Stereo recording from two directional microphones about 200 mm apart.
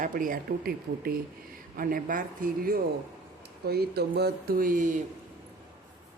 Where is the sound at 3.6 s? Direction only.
50° right (ahead or behind).